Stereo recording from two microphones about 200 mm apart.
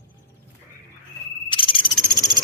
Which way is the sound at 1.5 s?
25° left (ahead or behind).